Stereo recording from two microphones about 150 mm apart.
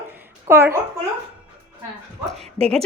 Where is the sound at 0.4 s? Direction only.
20° right (ahead or behind).